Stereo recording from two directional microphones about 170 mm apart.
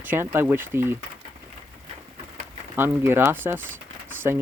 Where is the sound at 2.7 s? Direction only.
15° right (ahead or behind).